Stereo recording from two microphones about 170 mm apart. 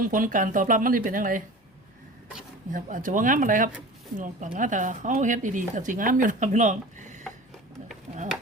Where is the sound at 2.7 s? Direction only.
50° right (ahead or behind).